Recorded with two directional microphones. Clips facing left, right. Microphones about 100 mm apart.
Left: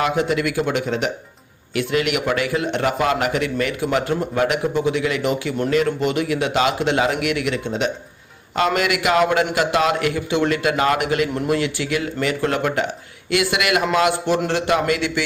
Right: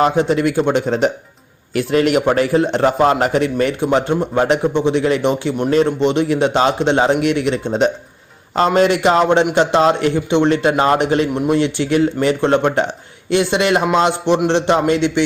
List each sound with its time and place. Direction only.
0.0 s a man's voice: 30° right (ahead or behind)